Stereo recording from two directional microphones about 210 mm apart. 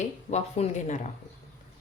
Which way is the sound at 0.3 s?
30° left (ahead or behind).